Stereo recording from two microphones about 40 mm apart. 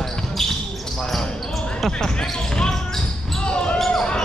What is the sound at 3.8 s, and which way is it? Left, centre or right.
Basketball bounce, centre.